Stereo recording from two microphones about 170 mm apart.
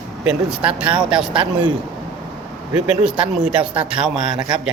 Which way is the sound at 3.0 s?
5° right (ahead or behind).